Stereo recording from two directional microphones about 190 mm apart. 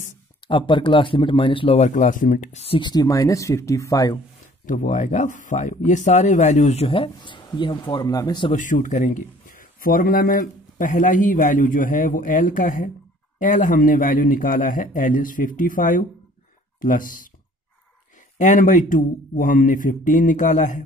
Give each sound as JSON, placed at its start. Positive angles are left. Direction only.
{"t": 0.5, "sound": "speech", "side_deg": 25}
{"t": 4.6, "sound": "speech", "side_deg": 45}
{"t": 8.5, "sound": "speech", "side_deg": 45}
{"t": 18.4, "sound": "speech", "side_deg": 45}